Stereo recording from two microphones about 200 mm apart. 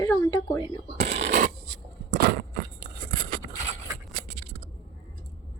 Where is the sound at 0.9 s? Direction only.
35° right (ahead or behind).